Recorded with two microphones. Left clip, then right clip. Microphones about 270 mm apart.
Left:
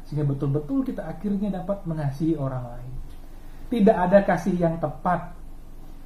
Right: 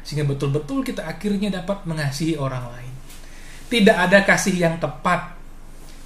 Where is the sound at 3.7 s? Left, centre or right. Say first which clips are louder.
Right 4 dB; right.